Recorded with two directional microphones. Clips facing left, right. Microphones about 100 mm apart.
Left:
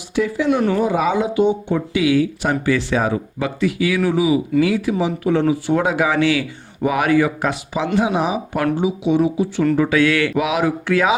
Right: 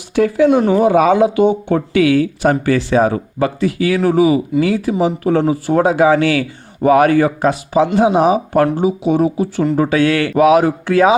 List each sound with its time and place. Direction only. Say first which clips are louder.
0.2 s speech: right 6 dB; 50° right (ahead or behind)
0.8 s speech: right 7 dB; 60° right (ahead or behind)
4.6 s speech: right 3 dB; 35° right (ahead or behind)